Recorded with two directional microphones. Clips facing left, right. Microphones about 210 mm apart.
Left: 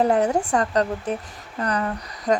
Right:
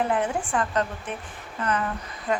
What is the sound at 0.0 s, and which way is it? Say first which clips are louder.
Speech: left 6 dB; 40° left (ahead or behind).